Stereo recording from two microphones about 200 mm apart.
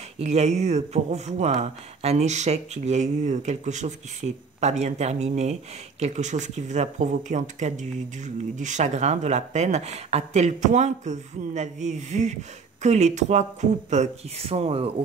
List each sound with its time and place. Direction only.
0.2 s speech: 35° right (ahead or behind)